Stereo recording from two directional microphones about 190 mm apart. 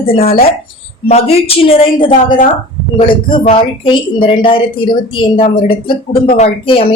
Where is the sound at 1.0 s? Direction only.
30° left (ahead or behind).